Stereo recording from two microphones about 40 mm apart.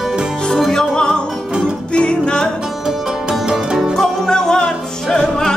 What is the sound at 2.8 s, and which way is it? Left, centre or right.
Music, centre.